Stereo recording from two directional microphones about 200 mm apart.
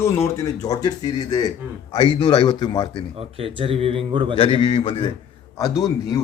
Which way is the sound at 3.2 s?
30° right (ahead or behind).